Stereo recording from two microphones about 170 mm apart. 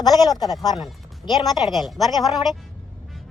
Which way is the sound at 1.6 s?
Centre (ahead or behind).